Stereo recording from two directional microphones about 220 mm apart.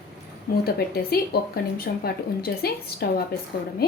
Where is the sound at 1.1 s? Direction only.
45° left (ahead or behind).